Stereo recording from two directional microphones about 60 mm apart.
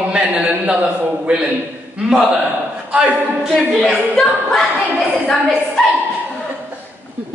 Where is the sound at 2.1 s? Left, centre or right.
Centre.